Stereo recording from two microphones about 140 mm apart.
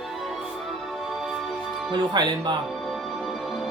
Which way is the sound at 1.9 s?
30° right (ahead or behind).